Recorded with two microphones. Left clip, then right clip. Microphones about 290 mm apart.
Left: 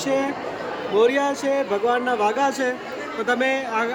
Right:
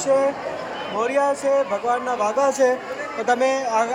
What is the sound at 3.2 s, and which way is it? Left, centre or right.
Speech, centre.